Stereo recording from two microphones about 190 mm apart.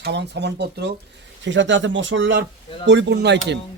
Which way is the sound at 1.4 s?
75° right (ahead or behind).